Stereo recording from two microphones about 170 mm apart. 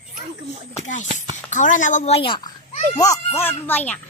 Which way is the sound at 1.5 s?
50° left (ahead or behind).